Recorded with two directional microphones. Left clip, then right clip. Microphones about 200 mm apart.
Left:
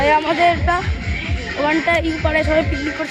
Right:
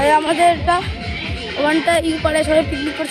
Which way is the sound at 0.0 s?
25° right (ahead or behind).